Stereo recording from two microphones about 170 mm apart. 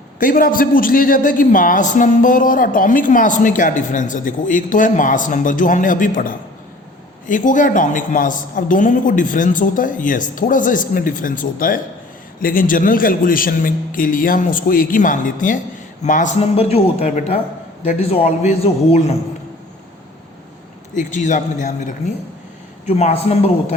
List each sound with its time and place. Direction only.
0.2 s a man's voice: 55° left (ahead or behind); by 19.1 s 35° left (ahead or behind)
20.9 s a man's voice: 45° left (ahead or behind)